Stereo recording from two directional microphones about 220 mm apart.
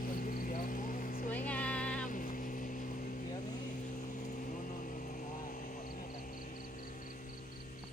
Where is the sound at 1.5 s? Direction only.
5° left (ahead or behind).